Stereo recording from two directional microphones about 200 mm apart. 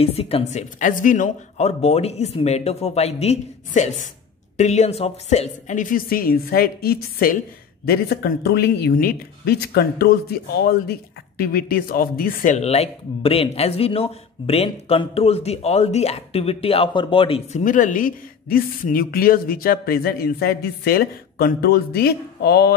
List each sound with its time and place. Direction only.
0.0 s speech: 30° left (ahead or behind)
17.6 s speech: 40° left (ahead or behind)